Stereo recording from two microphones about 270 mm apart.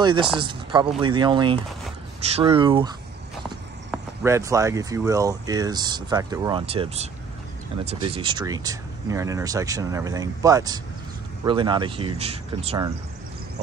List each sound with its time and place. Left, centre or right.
0.0 s speech: centre
3.4 s speech: centre